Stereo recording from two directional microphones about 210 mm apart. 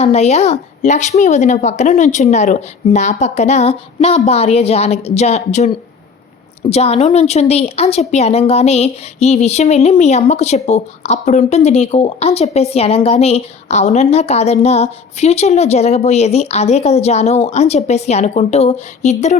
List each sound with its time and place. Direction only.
0.0 s a woman's voice: 30° left (ahead or behind)